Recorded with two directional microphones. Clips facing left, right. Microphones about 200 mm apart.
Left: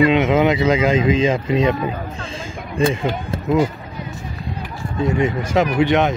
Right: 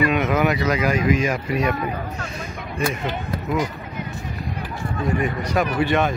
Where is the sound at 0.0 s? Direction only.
25° left (ahead or behind).